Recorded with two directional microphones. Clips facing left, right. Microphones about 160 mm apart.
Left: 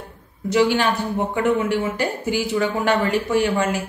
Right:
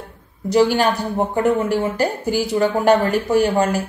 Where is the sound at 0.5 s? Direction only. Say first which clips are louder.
Right 2 dB; 40° right (ahead or behind).